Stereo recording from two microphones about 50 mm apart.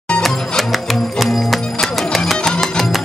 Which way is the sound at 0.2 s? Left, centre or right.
Centre.